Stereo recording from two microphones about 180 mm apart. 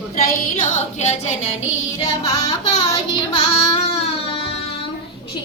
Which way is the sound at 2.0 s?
20° left (ahead or behind).